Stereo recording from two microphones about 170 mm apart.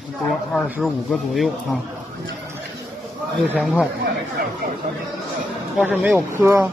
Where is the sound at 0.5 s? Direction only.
5° right (ahead or behind).